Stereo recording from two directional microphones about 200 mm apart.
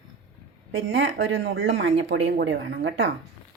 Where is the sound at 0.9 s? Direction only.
60° right (ahead or behind).